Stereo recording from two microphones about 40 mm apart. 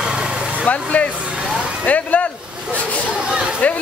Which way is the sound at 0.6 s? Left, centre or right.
Left.